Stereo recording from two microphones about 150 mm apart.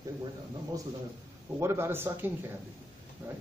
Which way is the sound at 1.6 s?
15° right (ahead or behind).